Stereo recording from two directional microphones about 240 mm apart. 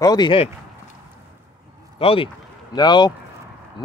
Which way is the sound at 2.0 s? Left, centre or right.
Left.